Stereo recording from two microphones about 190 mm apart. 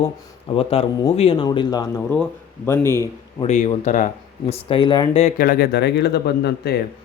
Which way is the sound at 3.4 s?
40° left (ahead or behind).